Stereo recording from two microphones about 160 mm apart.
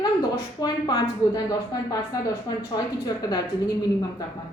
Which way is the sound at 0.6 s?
25° left (ahead or behind).